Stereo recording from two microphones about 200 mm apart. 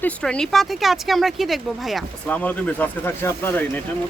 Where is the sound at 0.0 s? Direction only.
5° left (ahead or behind).